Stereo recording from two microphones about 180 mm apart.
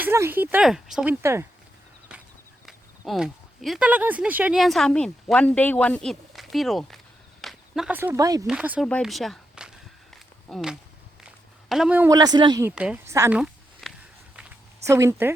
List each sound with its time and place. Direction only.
0.0 s speech: 10° right (ahead or behind)
3.1 s speech: centre (ahead or behind); by 8.4 s 20° right (ahead or behind)
8.4 s speech: 5° right (ahead or behind)
8.9 s walk: centre (ahead or behind)
11.7 s speech: 5° right (ahead or behind)
12.1 s speech: 20° right (ahead or behind)
12.6 s speech: 5° right (ahead or behind)
13.8 s walk: centre (ahead or behind)
14.8 s speech: 15° right (ahead or behind)